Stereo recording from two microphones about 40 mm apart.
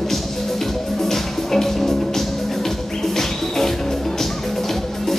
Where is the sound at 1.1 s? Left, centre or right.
Centre.